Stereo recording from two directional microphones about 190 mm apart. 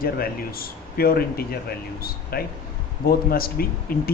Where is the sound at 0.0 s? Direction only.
50° left (ahead or behind).